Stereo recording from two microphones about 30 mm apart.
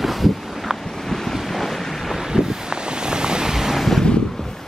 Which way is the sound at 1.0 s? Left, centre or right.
Centre.